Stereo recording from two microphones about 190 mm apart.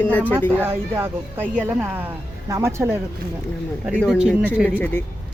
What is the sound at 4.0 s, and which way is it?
Speech, centre (ahead or behind).